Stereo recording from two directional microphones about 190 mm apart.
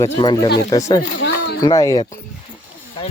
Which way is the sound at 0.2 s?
25° left (ahead or behind).